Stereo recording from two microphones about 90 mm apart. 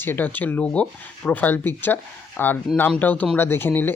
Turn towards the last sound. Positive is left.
turn(degrees=25)  # may be behind; listen again after turning